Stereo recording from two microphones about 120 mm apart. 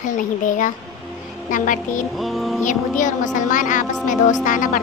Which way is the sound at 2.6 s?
90° left.